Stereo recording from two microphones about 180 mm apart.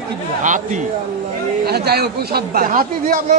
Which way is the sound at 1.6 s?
60° right (ahead or behind).